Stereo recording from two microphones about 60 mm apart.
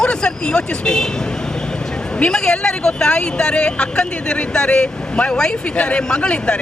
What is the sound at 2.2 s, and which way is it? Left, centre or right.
A man's voice, centre.